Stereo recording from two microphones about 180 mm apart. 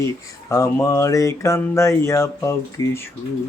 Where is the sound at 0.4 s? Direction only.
15° left (ahead or behind).